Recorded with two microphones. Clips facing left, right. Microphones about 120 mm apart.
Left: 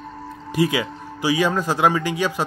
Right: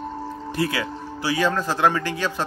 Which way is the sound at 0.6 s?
15° left (ahead or behind).